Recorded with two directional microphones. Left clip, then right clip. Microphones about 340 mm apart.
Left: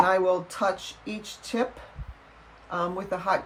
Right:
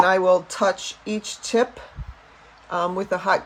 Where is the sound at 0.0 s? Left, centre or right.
Right.